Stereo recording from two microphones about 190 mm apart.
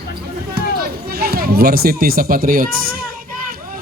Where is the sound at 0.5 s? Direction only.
55° right (ahead or behind).